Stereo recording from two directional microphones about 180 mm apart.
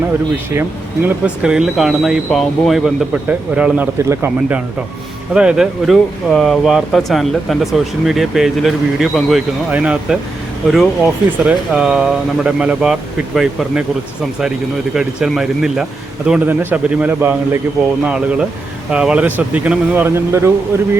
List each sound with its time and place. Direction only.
1.0 s speech: 5° right (ahead or behind)
14.9 s speech: 5° right (ahead or behind)